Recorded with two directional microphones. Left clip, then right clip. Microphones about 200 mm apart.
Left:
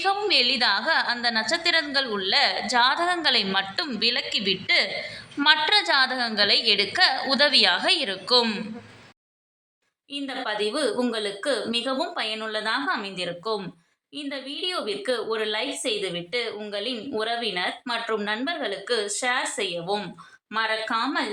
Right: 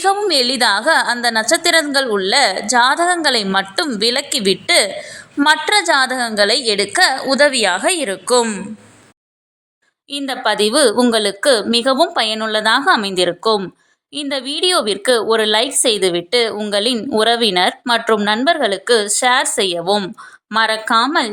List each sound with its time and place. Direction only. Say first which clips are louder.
0.0 s a woman's voice: right 7 dB; 40° right (ahead or behind)
5.4 s a woman's voice: right 6 dB; 40° right (ahead or behind)
10.1 s a woman's voice: right 11 dB; 50° right (ahead or behind)